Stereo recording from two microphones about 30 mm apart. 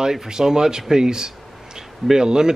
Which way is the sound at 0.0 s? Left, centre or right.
Centre.